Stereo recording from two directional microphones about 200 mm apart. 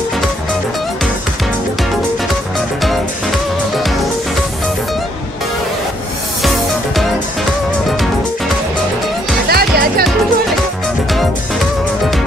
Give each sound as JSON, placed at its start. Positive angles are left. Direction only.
{"t": 9.5, "sound": "music", "side_deg": -50}